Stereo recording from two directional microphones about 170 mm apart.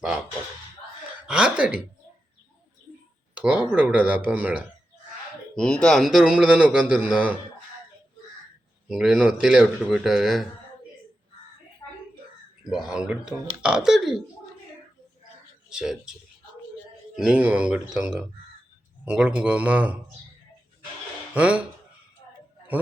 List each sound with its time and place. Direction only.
1.3 s a man's voice: 5° right (ahead or behind)
3.3 s speech: 5° right (ahead or behind)
5.5 s a man's voice: 5° left (ahead or behind)
8.9 s a man's voice: 5° right (ahead or behind)
11.8 s a sound: 20° left (ahead or behind)
12.7 s a man's voice: 5° right (ahead or behind)
15.7 s speech: 5° right (ahead or behind)
17.2 s a man's voice: 5° right (ahead or behind)
21.3 s speech: 5° right (ahead or behind)